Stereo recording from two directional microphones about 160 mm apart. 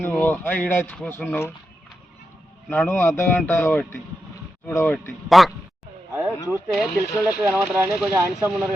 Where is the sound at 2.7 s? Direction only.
10° left (ahead or behind).